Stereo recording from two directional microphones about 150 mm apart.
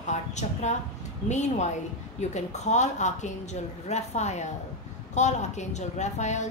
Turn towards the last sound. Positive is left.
turn(degrees=50)  # may be behind; listen again after turning